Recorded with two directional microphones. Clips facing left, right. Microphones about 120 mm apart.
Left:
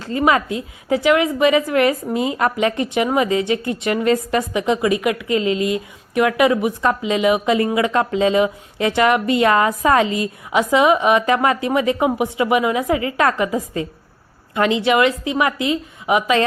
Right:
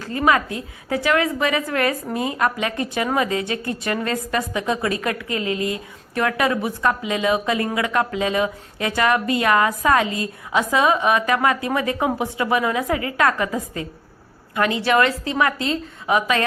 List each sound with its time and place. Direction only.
0.0 s speech: 20° left (ahead or behind)